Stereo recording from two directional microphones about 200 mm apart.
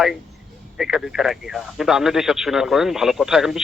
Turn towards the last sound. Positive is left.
turn(degrees=0)  # may be behind; listen again after turning